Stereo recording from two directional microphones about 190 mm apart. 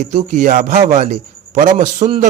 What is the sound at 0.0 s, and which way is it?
A man's voice, 40° right (ahead or behind).